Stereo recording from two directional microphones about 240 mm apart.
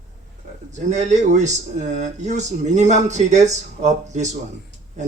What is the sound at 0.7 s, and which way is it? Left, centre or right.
Speech, right.